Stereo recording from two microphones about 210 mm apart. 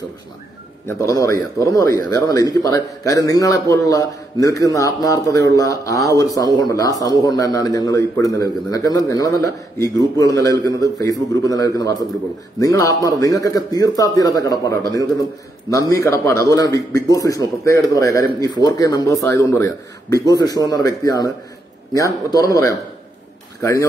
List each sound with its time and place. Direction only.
0.8 s a man's voice: 10° left (ahead or behind)